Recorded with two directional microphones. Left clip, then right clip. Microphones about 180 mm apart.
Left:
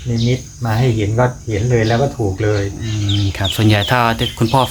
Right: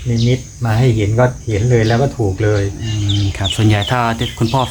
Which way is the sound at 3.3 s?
20° left (ahead or behind).